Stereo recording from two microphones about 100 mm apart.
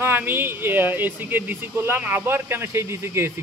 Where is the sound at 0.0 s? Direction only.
20° right (ahead or behind).